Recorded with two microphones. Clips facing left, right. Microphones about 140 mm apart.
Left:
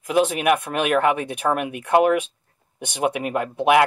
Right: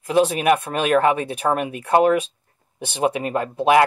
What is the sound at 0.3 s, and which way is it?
Speech, 5° left (ahead or behind).